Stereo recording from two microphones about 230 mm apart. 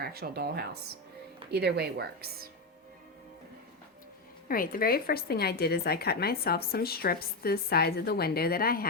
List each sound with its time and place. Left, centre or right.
0.0 s a woman's voice: right
4.4 s a woman's voice: left